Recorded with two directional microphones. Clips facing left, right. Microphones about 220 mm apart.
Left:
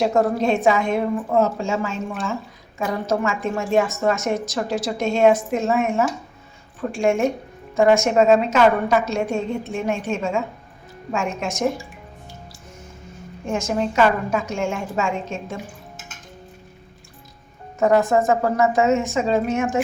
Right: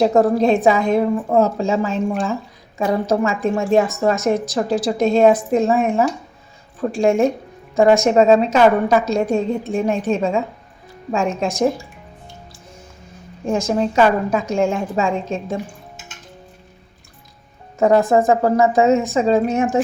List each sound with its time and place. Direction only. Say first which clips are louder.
0.0 s a woman's voice: right 5 dB; 35° right (ahead or behind)
13.5 s a woman's voice: right 4 dB; 35° right (ahead or behind)
17.7 s a woman's voice: right 3 dB; 30° right (ahead or behind)